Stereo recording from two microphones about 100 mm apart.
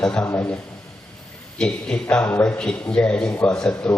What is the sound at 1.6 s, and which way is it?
A man's voice, 5° left (ahead or behind).